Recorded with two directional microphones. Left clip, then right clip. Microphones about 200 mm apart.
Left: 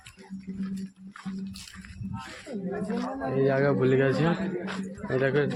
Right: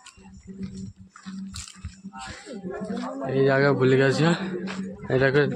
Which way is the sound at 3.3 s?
25° right (ahead or behind).